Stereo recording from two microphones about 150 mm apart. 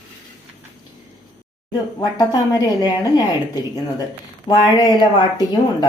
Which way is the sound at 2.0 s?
25° left (ahead or behind).